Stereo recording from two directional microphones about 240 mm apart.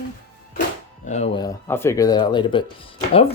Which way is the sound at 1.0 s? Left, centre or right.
Left.